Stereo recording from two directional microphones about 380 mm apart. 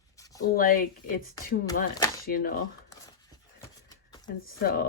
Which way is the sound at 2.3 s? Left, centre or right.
Left.